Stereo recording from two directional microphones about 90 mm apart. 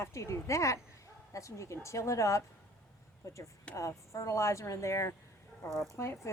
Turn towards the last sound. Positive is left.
turn(degrees=30)  # may be behind; listen again after turning